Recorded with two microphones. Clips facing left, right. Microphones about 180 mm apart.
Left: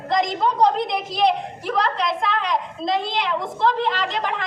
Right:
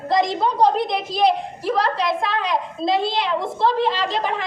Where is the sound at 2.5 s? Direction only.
5° right (ahead or behind).